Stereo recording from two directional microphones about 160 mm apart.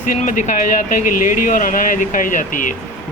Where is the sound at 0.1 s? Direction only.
50° left (ahead or behind).